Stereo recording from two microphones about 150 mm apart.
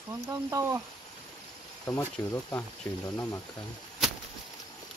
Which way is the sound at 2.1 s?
10° left (ahead or behind).